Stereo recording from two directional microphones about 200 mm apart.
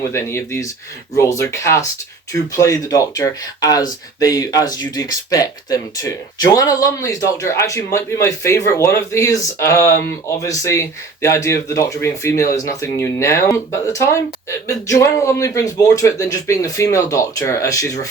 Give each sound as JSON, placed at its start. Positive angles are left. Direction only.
{"t": 0.0, "sound": "speech", "side_deg": 15}